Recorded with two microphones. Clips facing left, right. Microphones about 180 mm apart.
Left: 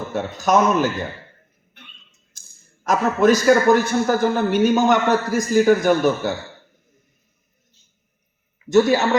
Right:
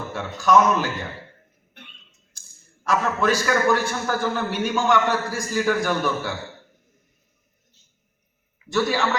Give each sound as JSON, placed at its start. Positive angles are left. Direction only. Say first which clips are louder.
{"t": 0.1, "sound": "a man's voice", "louder": "even", "side_deg": 40}
{"t": 2.8, "sound": "a man's voice", "louder": "left 5 dB", "side_deg": 45}
{"t": 5.3, "sound": "a man's voice", "louder": "left 8 dB", "side_deg": 20}
{"t": 5.6, "sound": "a man's voice", "louder": "left 4 dB", "side_deg": 40}
{"t": 8.7, "sound": "a man's voice", "louder": "left 7 dB", "side_deg": 45}